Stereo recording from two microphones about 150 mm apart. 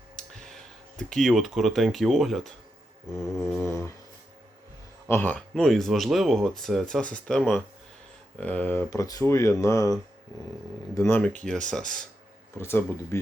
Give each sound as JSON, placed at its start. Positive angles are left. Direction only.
{"t": 0.2, "sound": "speech", "side_deg": 5}
{"t": 3.6, "sound": "a sound", "side_deg": 20}
{"t": 5.0, "sound": "speech", "side_deg": 15}
{"t": 5.5, "sound": "speech", "side_deg": 0}
{"t": 10.9, "sound": "speech", "side_deg": 20}
{"t": 11.2, "sound": "speech", "side_deg": 10}
{"t": 12.5, "sound": "speech", "side_deg": 15}